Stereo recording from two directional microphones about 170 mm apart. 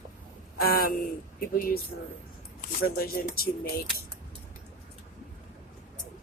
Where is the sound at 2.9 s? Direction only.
60° left (ahead or behind).